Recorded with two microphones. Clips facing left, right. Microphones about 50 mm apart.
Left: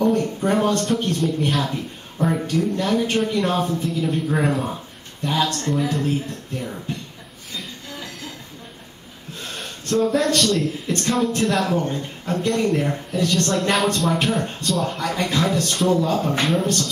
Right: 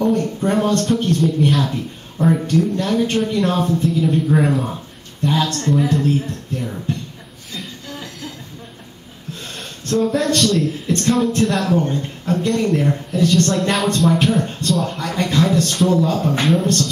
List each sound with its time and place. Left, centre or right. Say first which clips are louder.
0.2 s speech: right 2 dB; centre
9.4 s speech: left 3 dB; centre